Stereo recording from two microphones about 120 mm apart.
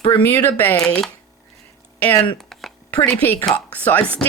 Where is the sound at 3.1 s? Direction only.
10° left (ahead or behind).